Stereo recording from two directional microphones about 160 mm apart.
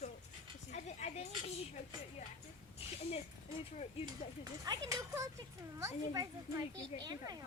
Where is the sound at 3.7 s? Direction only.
55° left (ahead or behind).